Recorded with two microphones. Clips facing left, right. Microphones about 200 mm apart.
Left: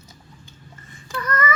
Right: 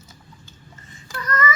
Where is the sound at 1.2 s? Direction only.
55° left (ahead or behind).